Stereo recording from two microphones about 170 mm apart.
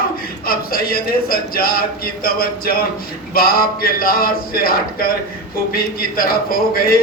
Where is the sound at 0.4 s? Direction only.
60° left (ahead or behind).